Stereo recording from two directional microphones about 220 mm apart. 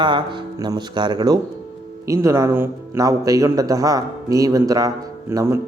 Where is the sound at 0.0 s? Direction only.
20° right (ahead or behind).